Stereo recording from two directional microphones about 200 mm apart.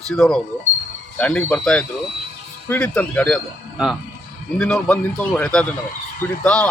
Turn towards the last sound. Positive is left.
turn(degrees=5)  # may be behind; listen again after turning